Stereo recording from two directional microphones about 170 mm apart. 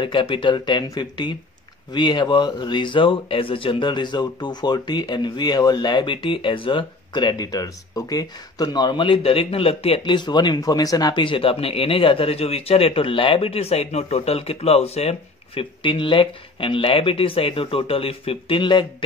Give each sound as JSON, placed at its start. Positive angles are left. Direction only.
{"t": 0.0, "sound": "speech", "side_deg": 30}